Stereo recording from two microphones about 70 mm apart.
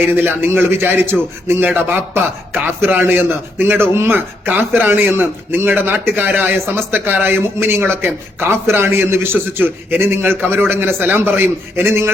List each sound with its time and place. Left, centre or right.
0.1 s speech: right